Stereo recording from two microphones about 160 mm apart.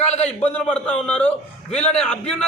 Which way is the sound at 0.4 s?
10° left (ahead or behind).